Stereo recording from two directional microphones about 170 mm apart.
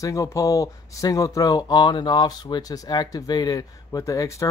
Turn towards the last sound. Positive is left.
turn(degrees=20)  # may be behind; listen again after turning